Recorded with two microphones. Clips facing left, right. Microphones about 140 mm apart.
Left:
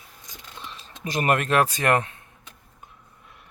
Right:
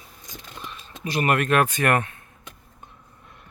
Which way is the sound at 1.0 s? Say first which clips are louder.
Right 1 dB; 40° left (ahead or behind).